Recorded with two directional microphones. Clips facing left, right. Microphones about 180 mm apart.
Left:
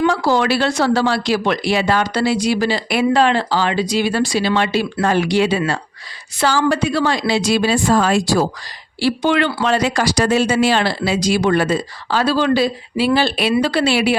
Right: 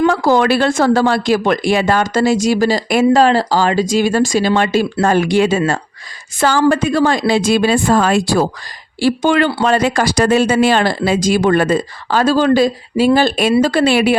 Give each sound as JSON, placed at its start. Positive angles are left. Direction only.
{"t": 0.0, "sound": "speech", "side_deg": -50}
{"t": 9.0, "sound": "speech", "side_deg": -45}